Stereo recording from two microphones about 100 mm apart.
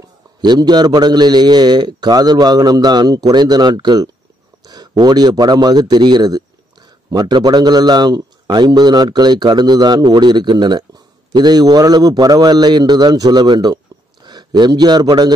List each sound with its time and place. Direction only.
0.4 s a man's voice: 45° right (ahead or behind)